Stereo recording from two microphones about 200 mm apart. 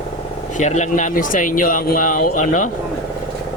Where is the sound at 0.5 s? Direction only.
35° left (ahead or behind).